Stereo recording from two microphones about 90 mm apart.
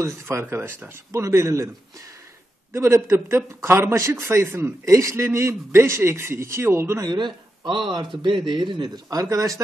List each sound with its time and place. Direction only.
0.0 s a man's voice: 30° right (ahead or behind)
7.1 s speech: 60° right (ahead or behind); by 9.6 s 35° right (ahead or behind)